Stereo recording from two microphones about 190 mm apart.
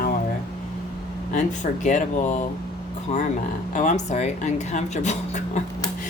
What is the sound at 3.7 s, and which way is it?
A woman's voice, 40° left (ahead or behind).